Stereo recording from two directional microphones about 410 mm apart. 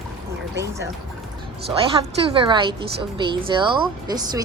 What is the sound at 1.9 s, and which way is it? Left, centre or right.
A woman's voice, centre.